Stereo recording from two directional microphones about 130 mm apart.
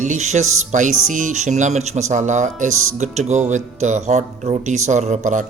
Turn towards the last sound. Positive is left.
turn(degrees=-75)  # may be behind; listen again after turning